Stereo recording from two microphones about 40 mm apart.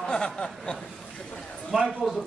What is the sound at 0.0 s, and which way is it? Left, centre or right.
Snicker, left.